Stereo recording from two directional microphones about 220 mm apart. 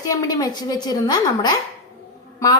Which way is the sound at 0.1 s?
15° left (ahead or behind).